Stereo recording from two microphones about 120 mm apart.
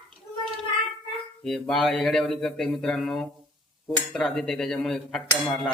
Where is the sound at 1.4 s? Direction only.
5° left (ahead or behind).